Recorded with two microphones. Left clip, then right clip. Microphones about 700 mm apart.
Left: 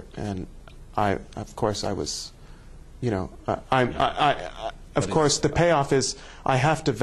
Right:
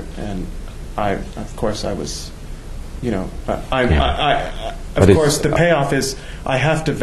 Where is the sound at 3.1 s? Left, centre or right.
Left.